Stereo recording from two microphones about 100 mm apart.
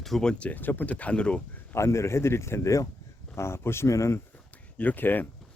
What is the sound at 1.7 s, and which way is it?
A man's voice, 30° left (ahead or behind).